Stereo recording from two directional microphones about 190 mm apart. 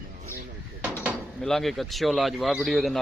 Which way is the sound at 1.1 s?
Centre (ahead or behind).